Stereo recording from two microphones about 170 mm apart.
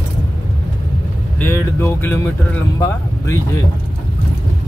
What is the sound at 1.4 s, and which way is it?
Speech, 10° left (ahead or behind).